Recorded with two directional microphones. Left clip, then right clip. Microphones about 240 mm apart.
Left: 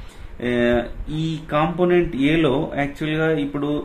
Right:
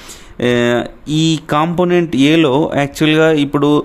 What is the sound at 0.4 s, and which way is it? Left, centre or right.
Speech, right.